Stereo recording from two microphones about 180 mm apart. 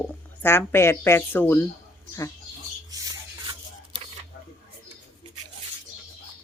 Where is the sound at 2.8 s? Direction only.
20° right (ahead or behind).